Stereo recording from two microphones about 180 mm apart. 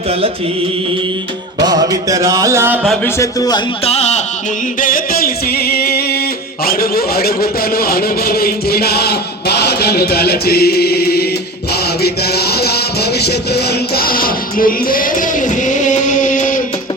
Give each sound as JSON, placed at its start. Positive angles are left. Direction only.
{"t": 1.6, "sound": "music", "side_deg": -20}
{"t": 2.8, "sound": "speech", "side_deg": 0}
{"t": 3.2, "sound": "a man's voice", "side_deg": 20}
{"t": 3.8, "sound": "music", "side_deg": 35}
{"t": 4.8, "sound": "music", "side_deg": 50}
{"t": 6.7, "sound": "speech", "side_deg": 55}
{"t": 11.7, "sound": "music", "side_deg": 60}